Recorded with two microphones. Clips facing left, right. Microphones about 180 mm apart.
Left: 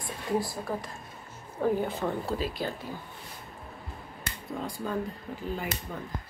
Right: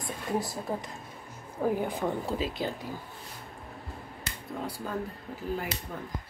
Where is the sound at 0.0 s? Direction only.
20° right (ahead or behind).